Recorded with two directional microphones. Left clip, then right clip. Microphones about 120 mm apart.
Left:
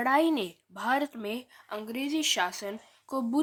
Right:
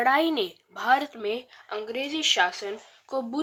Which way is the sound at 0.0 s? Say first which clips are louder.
Right 3 dB; 35° left (ahead or behind).